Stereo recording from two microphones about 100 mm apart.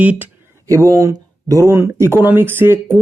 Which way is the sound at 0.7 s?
30° right (ahead or behind).